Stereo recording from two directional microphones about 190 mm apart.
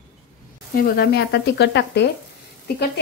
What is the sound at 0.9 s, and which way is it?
Speech, 55° left (ahead or behind).